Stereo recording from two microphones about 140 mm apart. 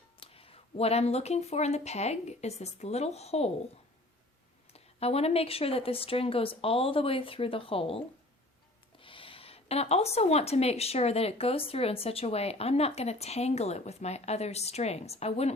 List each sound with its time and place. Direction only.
0.2 s a woman's voice: 45° left (ahead or behind)
4.7 s speech: 45° left (ahead or behind)
9.0 s a woman's voice: 40° left (ahead or behind)